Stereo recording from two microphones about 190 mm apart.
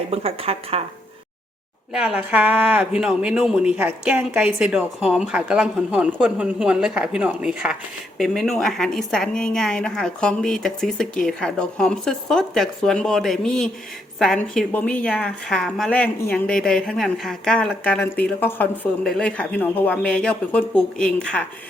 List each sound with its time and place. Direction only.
0.1 s speech: 30° right (ahead or behind)
1.9 s a woman's voice: 5° right (ahead or behind)